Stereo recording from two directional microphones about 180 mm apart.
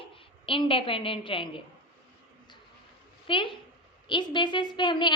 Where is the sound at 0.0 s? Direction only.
30° left (ahead or behind).